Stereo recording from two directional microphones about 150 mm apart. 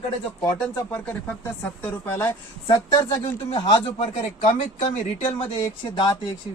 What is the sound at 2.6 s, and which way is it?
Speech, 30° left (ahead or behind).